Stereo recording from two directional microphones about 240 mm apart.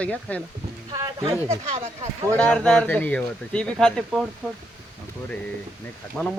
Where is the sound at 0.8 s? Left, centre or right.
Centre.